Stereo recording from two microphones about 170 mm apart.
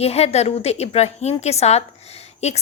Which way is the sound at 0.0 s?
40° left (ahead or behind).